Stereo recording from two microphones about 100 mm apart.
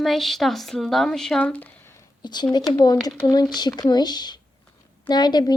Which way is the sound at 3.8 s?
45° left (ahead or behind).